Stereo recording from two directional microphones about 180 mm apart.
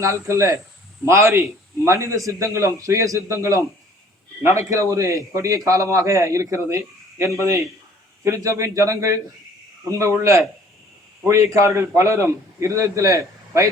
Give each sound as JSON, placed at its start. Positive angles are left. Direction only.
{"t": 0.0, "sound": "a man's voice", "side_deg": -15}